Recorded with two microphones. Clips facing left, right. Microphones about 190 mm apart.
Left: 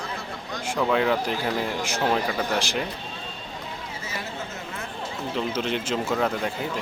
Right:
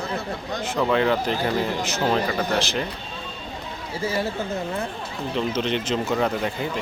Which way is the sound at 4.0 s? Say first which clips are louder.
Right 13 dB; 30° right (ahead or behind).